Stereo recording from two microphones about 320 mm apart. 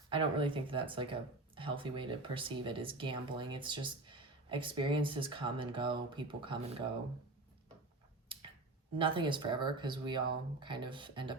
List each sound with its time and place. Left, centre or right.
0.1 s speech: centre
9.0 s speech: centre